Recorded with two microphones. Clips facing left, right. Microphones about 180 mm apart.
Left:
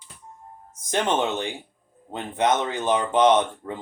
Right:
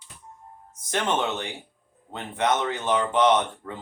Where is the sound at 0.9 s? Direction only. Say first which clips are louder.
Left 3 dB; 20° left (ahead or behind).